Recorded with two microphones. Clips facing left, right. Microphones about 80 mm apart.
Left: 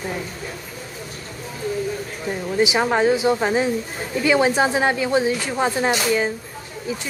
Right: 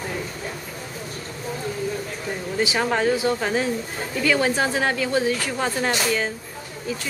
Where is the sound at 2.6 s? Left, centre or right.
Centre.